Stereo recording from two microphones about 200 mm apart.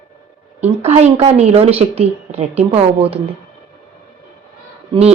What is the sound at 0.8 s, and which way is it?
A woman's voice, 30° right (ahead or behind).